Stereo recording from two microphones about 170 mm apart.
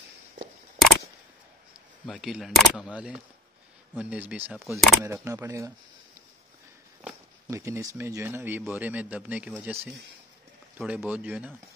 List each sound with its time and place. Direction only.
2.0 s a man's voice: 5° right (ahead or behind)
5.0 s a man's voice: 15° right (ahead or behind)
7.4 s a man's voice: 15° right (ahead or behind)
10.8 s a man's voice: 5° right (ahead or behind)